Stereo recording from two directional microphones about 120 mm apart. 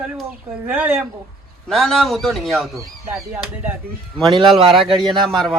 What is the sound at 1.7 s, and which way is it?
Speech, centre (ahead or behind).